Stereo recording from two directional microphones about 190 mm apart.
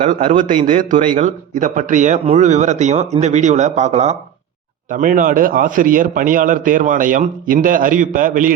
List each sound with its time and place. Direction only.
0.0 s a man's voice: 45° right (ahead or behind)